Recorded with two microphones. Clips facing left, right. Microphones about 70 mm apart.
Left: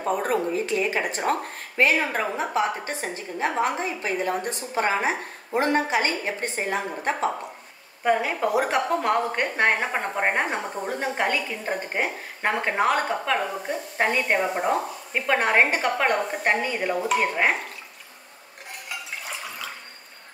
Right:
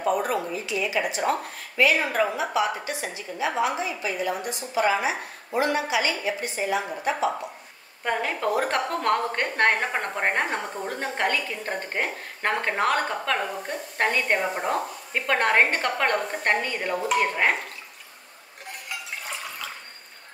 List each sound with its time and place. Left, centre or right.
0.0 s a woman's voice: left
8.0 s a woman's voice: centre